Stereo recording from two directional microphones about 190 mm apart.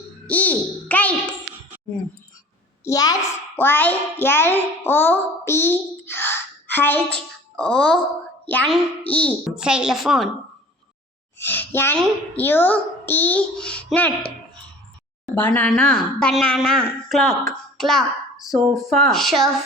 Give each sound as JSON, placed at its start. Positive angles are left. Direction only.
{"t": 0.3, "sound": "a child's voice", "side_deg": 5}
{"t": 2.8, "sound": "a child's voice", "side_deg": 20}
{"t": 9.6, "sound": "a woman's voice", "side_deg": -5}
{"t": 11.3, "sound": "a child's voice", "side_deg": 10}